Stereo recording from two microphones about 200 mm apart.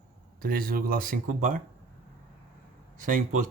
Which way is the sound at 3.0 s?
40° right (ahead or behind).